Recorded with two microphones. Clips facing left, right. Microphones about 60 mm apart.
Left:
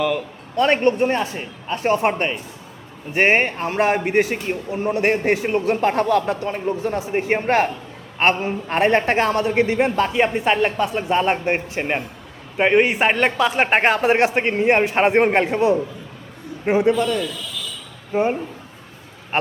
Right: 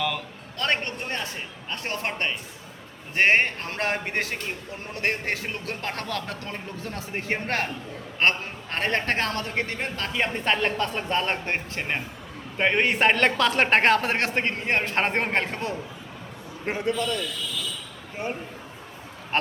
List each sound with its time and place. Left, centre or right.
0.0 s a woman's voice: centre
5.5 s a woman's voice: left; by 16.8 s centre
18.1 s speech: left
19.3 s a woman's voice: centre